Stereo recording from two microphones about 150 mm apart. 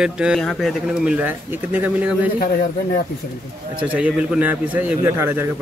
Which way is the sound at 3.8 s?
10° right (ahead or behind).